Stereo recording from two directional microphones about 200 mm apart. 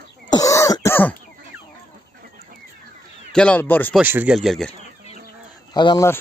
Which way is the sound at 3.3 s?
5° left (ahead or behind).